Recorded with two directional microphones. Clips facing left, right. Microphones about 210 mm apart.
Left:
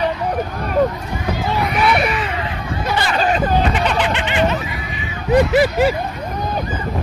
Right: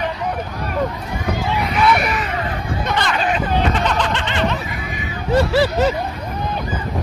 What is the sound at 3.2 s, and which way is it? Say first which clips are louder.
Hubbub: left 3 dB; 40° left (ahead or behind).